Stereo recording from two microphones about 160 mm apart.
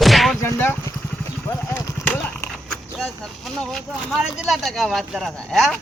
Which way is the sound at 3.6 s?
Centre (ahead or behind).